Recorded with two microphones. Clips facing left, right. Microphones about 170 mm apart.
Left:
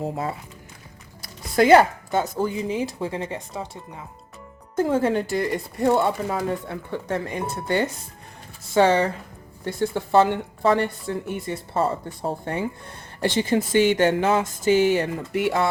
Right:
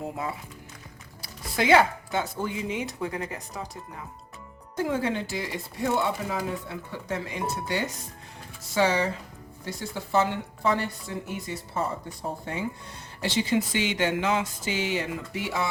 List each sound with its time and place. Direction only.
0.0 s speech: 40° left (ahead or behind)
1.2 s music: 45° left (ahead or behind)
2.1 s speech: 45° left (ahead or behind); by 4.0 s 25° left (ahead or behind)
4.8 s speech: 45° left (ahead or behind)
8.7 s a woman's voice: 55° left (ahead or behind)